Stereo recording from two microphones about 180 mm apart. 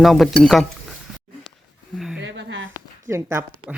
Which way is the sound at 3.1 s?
15° right (ahead or behind).